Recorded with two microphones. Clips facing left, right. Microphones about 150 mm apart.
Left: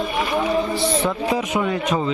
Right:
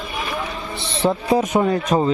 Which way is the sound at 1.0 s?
35° right (ahead or behind).